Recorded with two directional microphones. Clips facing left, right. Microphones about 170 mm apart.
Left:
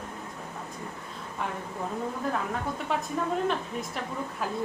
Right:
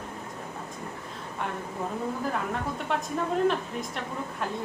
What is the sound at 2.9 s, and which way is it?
A woman's voice, centre (ahead or behind).